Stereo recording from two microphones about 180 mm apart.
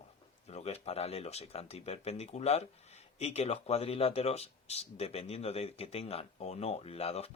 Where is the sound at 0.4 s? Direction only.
35° left (ahead or behind).